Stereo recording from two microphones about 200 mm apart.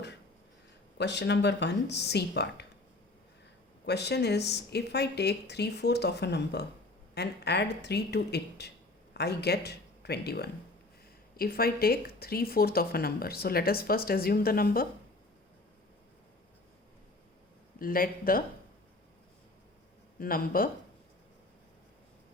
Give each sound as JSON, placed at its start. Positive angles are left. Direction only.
{"t": 0.9, "sound": "speech", "side_deg": 60}
{"t": 3.8, "sound": "speech", "side_deg": 55}
{"t": 17.7, "sound": "speech", "side_deg": 45}
{"t": 20.1, "sound": "speech", "side_deg": 45}